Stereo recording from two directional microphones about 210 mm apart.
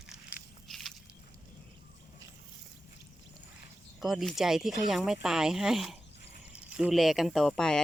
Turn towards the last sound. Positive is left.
turn(degrees=5)  # may be behind; listen again after turning